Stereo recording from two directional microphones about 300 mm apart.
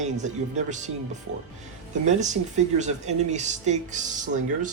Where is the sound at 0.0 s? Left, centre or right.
Right.